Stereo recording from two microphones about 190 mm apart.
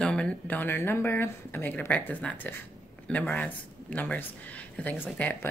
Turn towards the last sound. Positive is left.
turn(degrees=10)  # may be behind; listen again after turning